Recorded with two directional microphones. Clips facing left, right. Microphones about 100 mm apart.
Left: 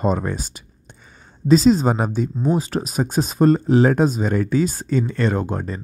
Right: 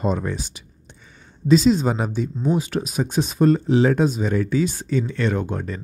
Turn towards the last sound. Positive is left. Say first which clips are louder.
# left 2 dB
turn(degrees=35)  # may be behind; listen again after turning